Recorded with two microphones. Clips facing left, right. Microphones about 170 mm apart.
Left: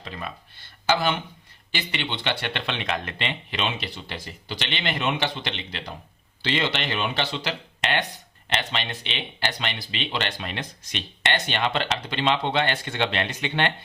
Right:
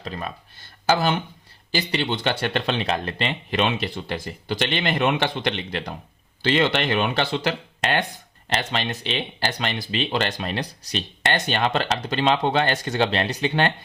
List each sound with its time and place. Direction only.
0.0 s speech: 40° right (ahead or behind)